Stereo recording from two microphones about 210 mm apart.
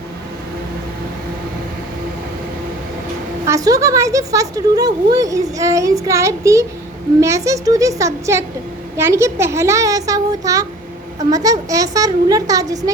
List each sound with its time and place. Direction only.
3.4 s speech: 15° right (ahead or behind)